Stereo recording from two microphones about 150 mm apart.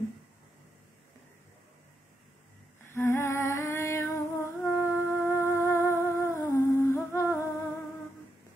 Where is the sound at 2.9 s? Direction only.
15° left (ahead or behind).